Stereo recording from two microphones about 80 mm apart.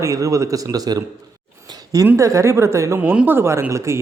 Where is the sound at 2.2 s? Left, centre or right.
Right.